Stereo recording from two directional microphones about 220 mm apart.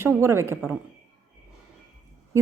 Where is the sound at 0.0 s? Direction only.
10° right (ahead or behind).